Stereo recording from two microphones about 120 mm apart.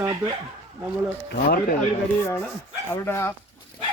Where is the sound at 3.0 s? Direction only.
20° left (ahead or behind).